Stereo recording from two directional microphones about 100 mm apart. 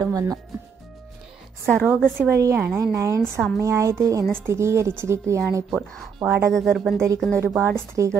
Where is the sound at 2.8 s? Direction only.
30° right (ahead or behind).